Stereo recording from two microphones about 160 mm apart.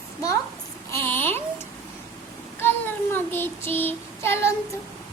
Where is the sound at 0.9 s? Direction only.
15° left (ahead or behind).